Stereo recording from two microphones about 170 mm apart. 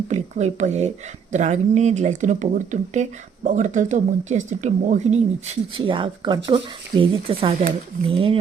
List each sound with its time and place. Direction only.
0.1 s speech: 40° right (ahead or behind)